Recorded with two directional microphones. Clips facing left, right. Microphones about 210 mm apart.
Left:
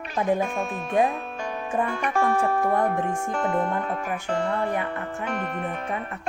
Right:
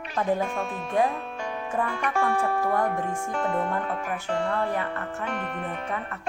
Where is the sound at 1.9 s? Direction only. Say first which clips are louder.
Left 2 dB; 45° left (ahead or behind).